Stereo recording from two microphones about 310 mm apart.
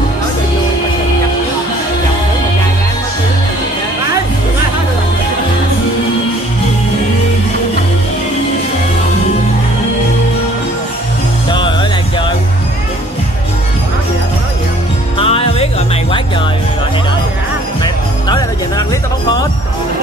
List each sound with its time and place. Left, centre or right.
15.1 s music: centre
17.8 s music: centre